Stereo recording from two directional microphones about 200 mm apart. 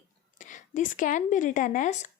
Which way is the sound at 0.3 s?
40° left (ahead or behind).